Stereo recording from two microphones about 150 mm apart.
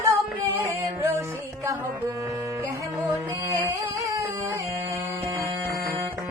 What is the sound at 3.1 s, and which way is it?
Music, 25° right (ahead or behind).